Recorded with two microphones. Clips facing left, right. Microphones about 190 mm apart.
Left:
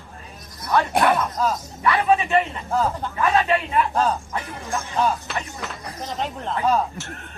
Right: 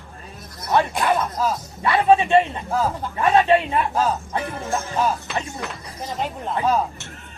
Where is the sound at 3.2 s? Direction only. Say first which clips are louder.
Right 4 dB; 25° right (ahead or behind).